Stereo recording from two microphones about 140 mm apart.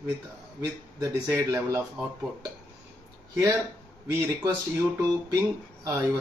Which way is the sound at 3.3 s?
20° right (ahead or behind).